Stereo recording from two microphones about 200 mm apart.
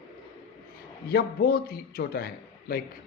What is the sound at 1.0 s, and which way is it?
Speech, 50° left (ahead or behind).